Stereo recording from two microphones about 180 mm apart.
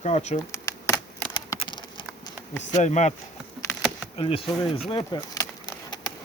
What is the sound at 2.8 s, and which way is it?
Speech, 40° left (ahead or behind).